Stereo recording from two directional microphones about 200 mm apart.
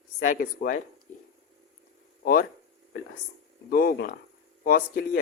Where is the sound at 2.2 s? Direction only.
45° left (ahead or behind).